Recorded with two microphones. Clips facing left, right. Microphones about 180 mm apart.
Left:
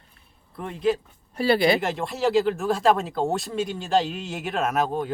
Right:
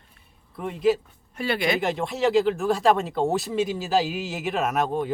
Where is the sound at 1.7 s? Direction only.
Centre (ahead or behind).